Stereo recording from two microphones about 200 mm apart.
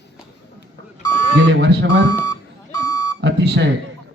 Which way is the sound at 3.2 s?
60° right (ahead or behind).